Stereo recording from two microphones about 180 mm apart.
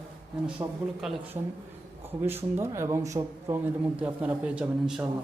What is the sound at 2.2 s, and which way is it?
Speech, 15° right (ahead or behind).